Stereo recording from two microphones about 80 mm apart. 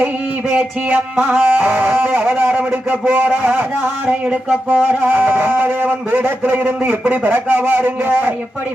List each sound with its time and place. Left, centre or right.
0.5 s a man's voice: right
4.7 s a man's voice: right